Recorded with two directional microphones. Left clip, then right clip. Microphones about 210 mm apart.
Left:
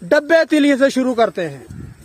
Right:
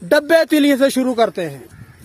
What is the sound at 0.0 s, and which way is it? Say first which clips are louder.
A man's voice: even; centre (ahead or behind).